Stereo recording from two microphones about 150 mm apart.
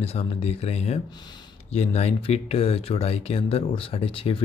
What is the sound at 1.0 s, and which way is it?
Speech, 30° left (ahead or behind).